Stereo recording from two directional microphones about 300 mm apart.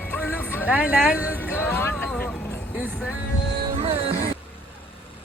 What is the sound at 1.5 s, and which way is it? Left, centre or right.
Music, centre.